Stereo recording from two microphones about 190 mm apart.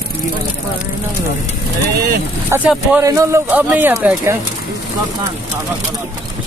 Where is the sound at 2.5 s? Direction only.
10° right (ahead or behind).